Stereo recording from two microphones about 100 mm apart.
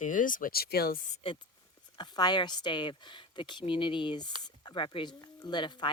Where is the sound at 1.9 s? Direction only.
45° left (ahead or behind).